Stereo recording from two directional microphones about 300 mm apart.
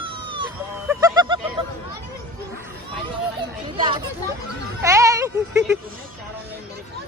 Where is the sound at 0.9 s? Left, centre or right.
Centre.